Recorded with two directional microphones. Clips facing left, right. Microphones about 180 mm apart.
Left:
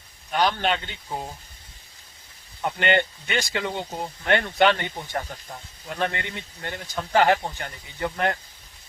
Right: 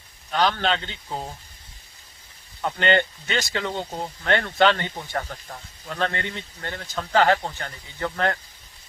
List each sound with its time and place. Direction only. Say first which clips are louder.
0.3 s speech: even; 15° left (ahead or behind)
2.6 s speech: right 1 dB; 15° left (ahead or behind)